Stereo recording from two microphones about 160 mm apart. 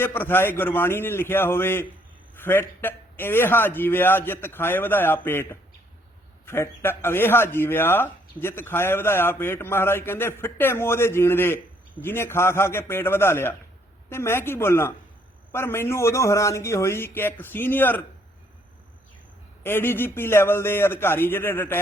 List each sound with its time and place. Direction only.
0.0 s a man's voice: 15° left (ahead or behind)
19.6 s a man's voice: 15° left (ahead or behind)